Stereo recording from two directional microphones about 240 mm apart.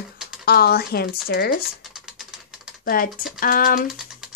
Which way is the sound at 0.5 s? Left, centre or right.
Left.